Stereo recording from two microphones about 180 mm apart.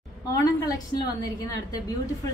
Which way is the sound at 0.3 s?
20° left (ahead or behind).